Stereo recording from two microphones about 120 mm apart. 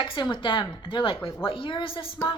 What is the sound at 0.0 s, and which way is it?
A woman's voice, 45° left (ahead or behind).